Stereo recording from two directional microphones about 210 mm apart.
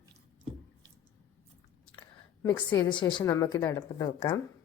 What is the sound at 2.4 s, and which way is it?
A woman's voice, 20° left (ahead or behind).